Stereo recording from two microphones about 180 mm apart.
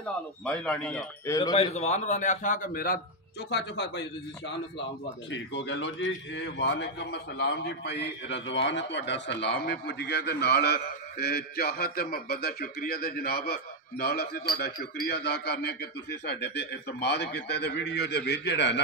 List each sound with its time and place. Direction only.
0.0 s a man's voice: 5° left (ahead or behind)
1.6 s a man's voice: 35° left (ahead or behind)
3.4 s a man's voice: 70° left (ahead or behind)
5.3 s a man's voice: 85° left